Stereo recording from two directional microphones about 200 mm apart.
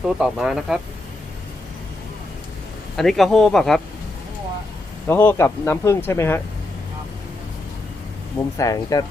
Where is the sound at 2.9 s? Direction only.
Centre (ahead or behind).